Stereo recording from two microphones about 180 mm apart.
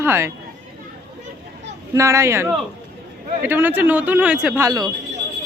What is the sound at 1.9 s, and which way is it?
A man's voice, 15° right (ahead or behind).